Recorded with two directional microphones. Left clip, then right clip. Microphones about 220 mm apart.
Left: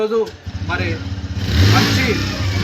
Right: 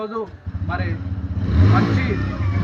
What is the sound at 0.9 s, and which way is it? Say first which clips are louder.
Vehicle: left 4 dB; 5° right (ahead or behind).